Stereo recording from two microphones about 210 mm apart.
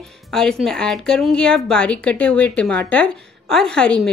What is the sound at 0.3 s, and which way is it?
A woman's voice, centre (ahead or behind).